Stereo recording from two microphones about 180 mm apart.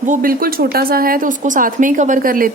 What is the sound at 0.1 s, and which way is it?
Speech, 50° right (ahead or behind).